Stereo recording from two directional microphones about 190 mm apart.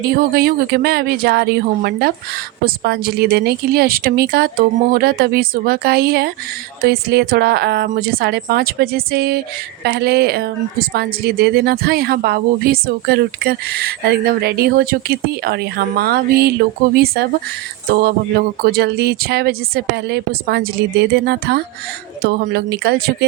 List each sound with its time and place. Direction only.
0.0 s a woman's voice: 55° right (ahead or behind)
17.9 s a woman's voice: 55° right (ahead or behind)